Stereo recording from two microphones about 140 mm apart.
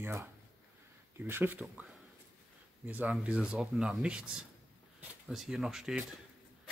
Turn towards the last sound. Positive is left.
turn(degrees=-5)  # may be behind; listen again after turning